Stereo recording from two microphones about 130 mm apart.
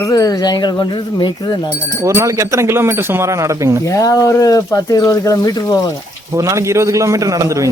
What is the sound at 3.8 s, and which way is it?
Speech, 25° left (ahead or behind).